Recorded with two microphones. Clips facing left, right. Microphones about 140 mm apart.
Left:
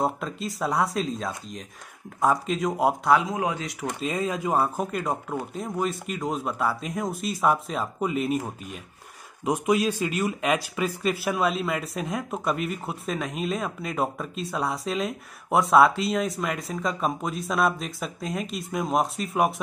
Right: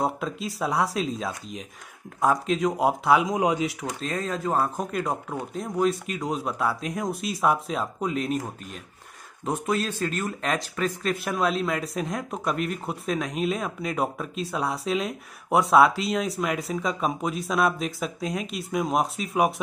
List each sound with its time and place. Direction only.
0.0 s speech: centre (ahead or behind)
3.2 s speech: 15° right (ahead or behind)
4.0 s speech: 10° left (ahead or behind)